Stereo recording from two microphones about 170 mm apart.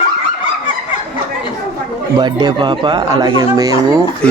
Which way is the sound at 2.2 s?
25° right (ahead or behind).